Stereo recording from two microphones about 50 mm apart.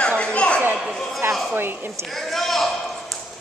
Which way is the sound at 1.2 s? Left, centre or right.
Right.